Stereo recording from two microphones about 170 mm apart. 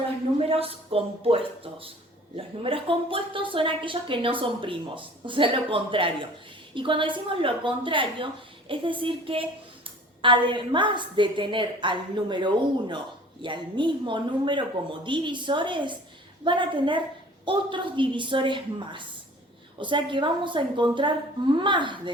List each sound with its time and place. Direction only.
0.3 s a woman's voice: 35° right (ahead or behind)